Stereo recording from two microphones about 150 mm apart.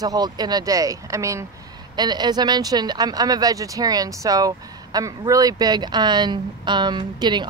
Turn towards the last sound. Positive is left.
turn(degrees=-30)  # may be behind; listen again after turning